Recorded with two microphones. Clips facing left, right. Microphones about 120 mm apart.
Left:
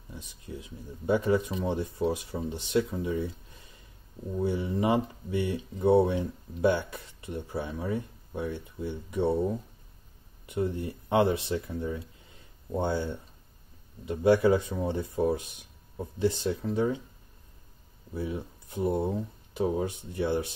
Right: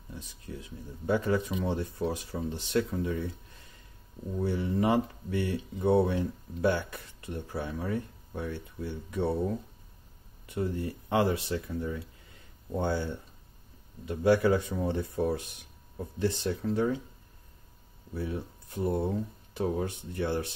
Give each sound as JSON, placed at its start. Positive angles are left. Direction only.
{"t": 0.1, "sound": "speech", "side_deg": 15}
{"t": 18.1, "sound": "speech", "side_deg": 20}